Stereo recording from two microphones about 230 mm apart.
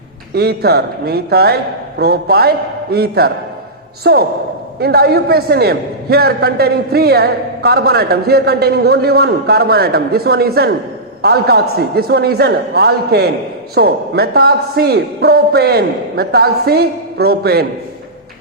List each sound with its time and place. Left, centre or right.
0.3 s a man's voice: right